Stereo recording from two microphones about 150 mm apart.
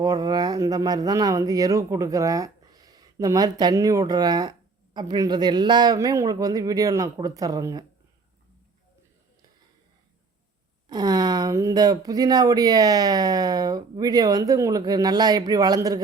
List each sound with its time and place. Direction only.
0.0 s speech: 25° right (ahead or behind)
10.8 s speech: 25° right (ahead or behind)